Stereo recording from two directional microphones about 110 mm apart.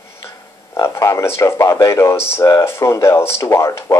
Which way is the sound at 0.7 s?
30° left (ahead or behind).